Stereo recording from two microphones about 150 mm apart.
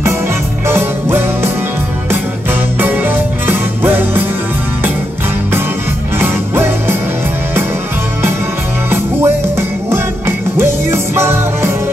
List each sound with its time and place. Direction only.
0.7 s music: 15° right (ahead or behind)
2.8 s music: 10° right (ahead or behind)
6.1 s music: 15° right (ahead or behind)
8.9 s music: 15° right (ahead or behind)